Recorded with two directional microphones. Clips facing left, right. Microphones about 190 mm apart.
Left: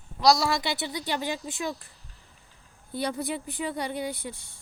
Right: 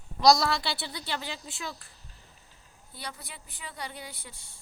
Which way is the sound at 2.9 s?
20° left (ahead or behind).